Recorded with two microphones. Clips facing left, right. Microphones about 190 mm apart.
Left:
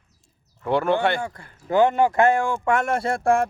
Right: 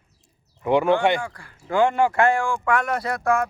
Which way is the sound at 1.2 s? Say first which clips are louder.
Left 3 dB; 25° left (ahead or behind).